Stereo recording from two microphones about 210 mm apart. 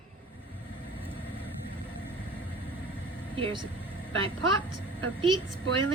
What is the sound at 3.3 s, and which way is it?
Speech, 25° right (ahead or behind).